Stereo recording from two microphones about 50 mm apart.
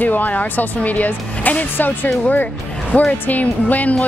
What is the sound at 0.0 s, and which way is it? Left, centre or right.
Speech, left.